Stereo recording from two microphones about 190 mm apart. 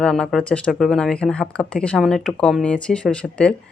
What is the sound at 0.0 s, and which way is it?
Speech, 5° left (ahead or behind).